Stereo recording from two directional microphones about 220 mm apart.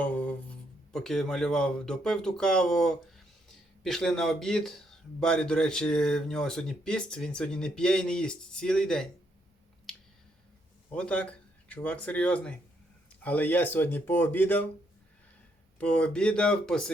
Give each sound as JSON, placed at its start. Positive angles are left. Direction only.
{"t": 0.0, "sound": "a sound", "side_deg": 5}
{"t": 0.9, "sound": "speech", "side_deg": 0}
{"t": 10.9, "sound": "speech", "side_deg": 5}
{"t": 15.8, "sound": "speech", "side_deg": 5}